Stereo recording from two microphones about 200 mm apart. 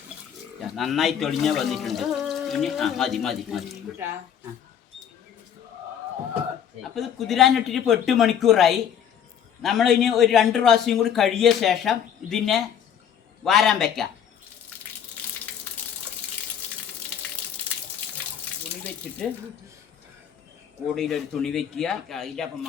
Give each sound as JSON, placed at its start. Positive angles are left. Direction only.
{"t": 0.8, "sound": "a man's voice", "side_deg": 0}
{"t": 6.8, "sound": "a man's voice", "side_deg": 0}
{"t": 20.8, "sound": "a man's voice", "side_deg": 0}